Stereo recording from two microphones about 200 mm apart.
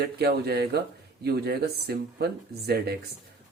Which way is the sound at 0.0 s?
50° right (ahead or behind).